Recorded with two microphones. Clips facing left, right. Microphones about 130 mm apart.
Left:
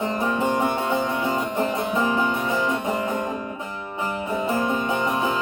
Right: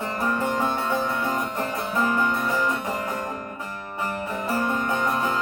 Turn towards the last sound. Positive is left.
turn(degrees=15)  # may be behind; listen again after turning